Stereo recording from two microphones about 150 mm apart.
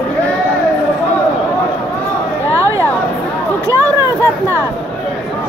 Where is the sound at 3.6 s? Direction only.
20° right (ahead or behind).